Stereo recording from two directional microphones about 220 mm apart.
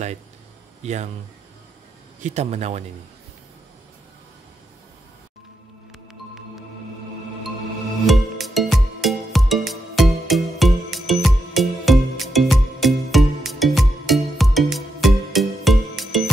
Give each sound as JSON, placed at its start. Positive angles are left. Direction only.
{"t": 0.8, "sound": "speech", "side_deg": -30}
{"t": 2.2, "sound": "speech", "side_deg": -30}
{"t": 8.1, "sound": "music", "side_deg": 0}